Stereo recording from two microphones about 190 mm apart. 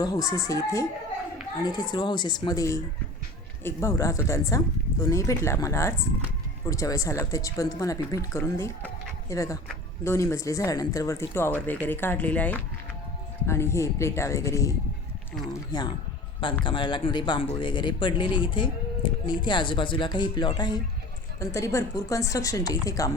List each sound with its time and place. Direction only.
0.0 s speech: 20° left (ahead or behind)